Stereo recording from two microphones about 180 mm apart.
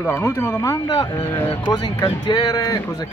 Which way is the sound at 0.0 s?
15° left (ahead or behind).